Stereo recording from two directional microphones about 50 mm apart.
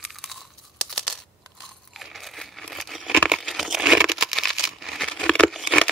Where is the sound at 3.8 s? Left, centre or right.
Centre.